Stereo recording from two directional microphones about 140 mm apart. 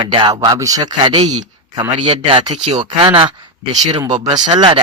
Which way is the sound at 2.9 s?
35° right (ahead or behind).